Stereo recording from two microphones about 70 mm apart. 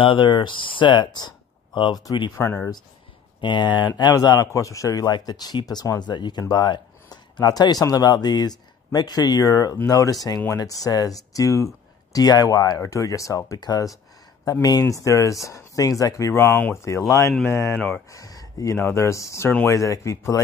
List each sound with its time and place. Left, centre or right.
0.2 s speech: left
2.3 s speech: left
3.4 s speech: left
4.2 s speech: left
4.5 s speech: left
5.1 s speech: left
9.4 s speech: left
13.6 s speech: left
17.7 s speech: left
18.1 s a sound: left
18.8 s speech: left